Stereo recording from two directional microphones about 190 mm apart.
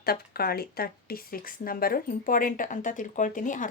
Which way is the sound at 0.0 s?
55° left (ahead or behind).